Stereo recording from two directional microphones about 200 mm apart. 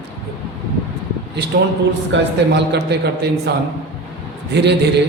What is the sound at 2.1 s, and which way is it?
A man's voice, 60° right (ahead or behind).